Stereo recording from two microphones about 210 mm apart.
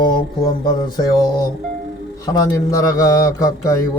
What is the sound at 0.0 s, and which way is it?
Mantra, 20° left (ahead or behind).